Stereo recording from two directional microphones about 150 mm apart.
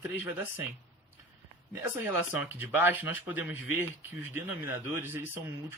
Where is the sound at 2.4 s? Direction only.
10° right (ahead or behind).